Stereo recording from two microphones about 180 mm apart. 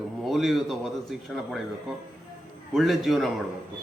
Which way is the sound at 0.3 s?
Centre (ahead or behind).